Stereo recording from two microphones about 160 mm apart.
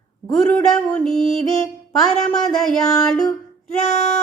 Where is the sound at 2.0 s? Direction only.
5° left (ahead or behind).